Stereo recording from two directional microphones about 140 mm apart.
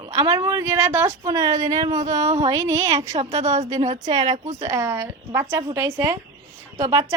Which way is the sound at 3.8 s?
55° right (ahead or behind).